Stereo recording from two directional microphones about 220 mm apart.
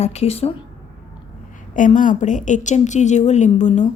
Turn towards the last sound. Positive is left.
turn(degrees=30)  # may be behind; listen again after turning